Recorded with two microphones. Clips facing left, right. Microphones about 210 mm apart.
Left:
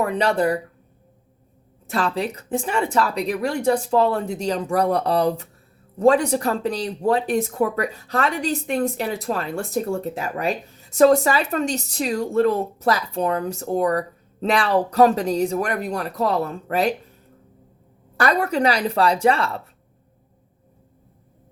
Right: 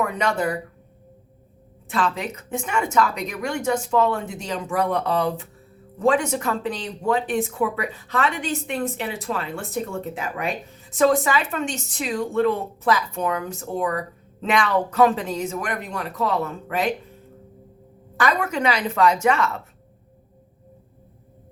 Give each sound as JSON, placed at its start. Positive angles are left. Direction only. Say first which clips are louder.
{"t": 0.0, "sound": "speech", "louder": "left 3 dB", "side_deg": 35}
{"t": 1.9, "sound": "speech", "louder": "left 2 dB", "side_deg": 35}
{"t": 18.2, "sound": "speech", "louder": "left 3 dB", "side_deg": 40}